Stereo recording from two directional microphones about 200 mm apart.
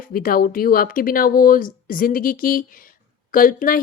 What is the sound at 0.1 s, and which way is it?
A woman's voice, 45° left (ahead or behind).